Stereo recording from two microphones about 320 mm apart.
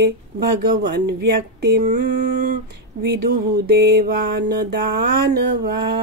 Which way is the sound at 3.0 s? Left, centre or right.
Right.